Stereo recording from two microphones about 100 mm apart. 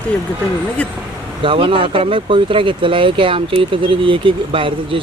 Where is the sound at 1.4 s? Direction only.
60° right (ahead or behind).